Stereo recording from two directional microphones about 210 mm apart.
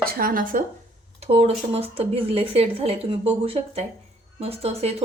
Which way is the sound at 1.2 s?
30° right (ahead or behind).